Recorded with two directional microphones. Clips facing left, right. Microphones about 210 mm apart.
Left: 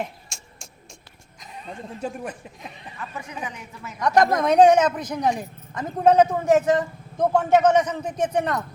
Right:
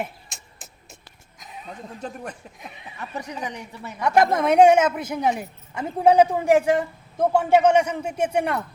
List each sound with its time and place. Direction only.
0.0 s a sound: centre (ahead or behind)
1.4 s speech: centre (ahead or behind)
2.6 s speech: 5° right (ahead or behind)
3.2 s a woman's voice: 40° right (ahead or behind)
4.0 s speech: 5° right (ahead or behind)